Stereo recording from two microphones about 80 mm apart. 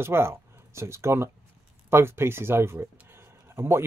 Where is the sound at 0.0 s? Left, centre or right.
Right.